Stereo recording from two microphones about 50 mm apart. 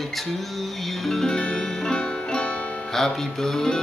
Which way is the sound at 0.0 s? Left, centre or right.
Centre.